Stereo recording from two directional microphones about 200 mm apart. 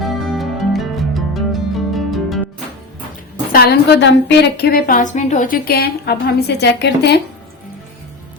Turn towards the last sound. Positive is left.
turn(degrees=55)  # may be behind; listen again after turning